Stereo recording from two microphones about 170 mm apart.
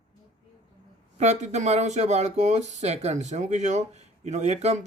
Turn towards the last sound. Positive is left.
turn(degrees=-40)  # may be behind; listen again after turning